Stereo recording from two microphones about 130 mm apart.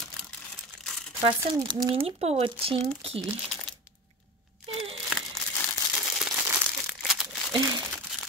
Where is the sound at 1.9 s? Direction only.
50° right (ahead or behind).